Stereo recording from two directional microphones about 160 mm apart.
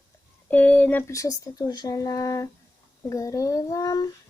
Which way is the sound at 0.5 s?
10° left (ahead or behind).